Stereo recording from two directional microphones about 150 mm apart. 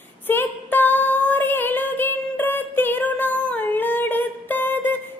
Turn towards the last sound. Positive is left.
turn(degrees=10)  # may be behind; listen again after turning